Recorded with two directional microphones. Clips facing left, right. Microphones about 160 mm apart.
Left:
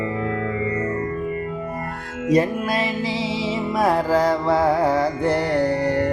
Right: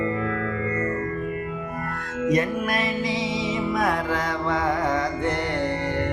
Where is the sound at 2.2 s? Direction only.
30° left (ahead or behind).